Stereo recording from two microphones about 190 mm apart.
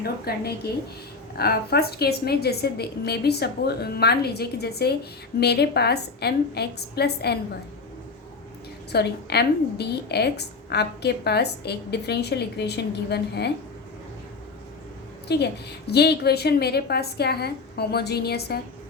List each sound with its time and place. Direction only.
0.0 s a woman's voice: 55° left (ahead or behind)
8.9 s a woman's voice: 60° left (ahead or behind)
15.3 s a woman's voice: 60° left (ahead or behind)